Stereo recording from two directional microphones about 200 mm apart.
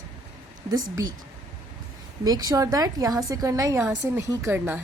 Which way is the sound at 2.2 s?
20° right (ahead or behind).